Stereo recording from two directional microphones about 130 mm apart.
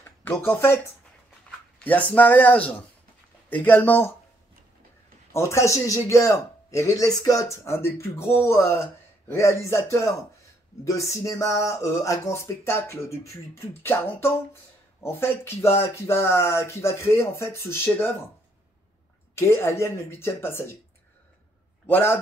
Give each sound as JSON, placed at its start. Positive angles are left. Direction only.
{"t": 0.2, "sound": "speech", "side_deg": 15}
{"t": 1.8, "sound": "speech", "side_deg": 10}
{"t": 5.3, "sound": "a man's voice", "side_deg": 20}
{"t": 19.3, "sound": "a man's voice", "side_deg": 20}
{"t": 21.8, "sound": "speech", "side_deg": 15}